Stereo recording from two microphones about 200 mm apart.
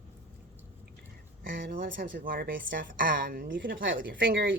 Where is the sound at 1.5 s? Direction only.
45° right (ahead or behind).